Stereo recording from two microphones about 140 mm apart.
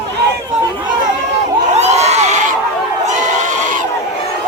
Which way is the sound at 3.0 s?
60° right (ahead or behind).